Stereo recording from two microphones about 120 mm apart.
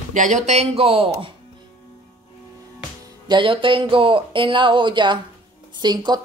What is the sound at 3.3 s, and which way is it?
A woman's voice, 45° right (ahead or behind).